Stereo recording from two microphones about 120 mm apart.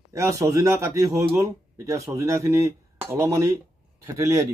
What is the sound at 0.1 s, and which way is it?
Speech, 25° right (ahead or behind).